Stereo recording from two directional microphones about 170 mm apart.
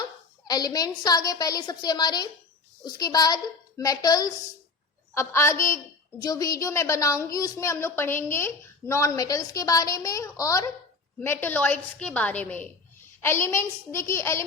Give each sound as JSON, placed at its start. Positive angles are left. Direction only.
{"t": 0.4, "sound": "a woman's voice", "side_deg": 25}